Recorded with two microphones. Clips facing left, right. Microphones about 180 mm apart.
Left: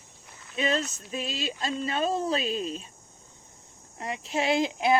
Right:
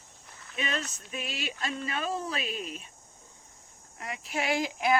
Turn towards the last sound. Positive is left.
turn(degrees=25)  # may be behind; listen again after turning